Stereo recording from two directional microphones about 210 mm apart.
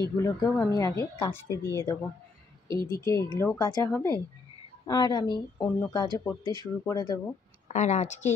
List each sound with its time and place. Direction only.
0.0 s speech: 15° left (ahead or behind)
7.6 s a woman's voice: 35° left (ahead or behind)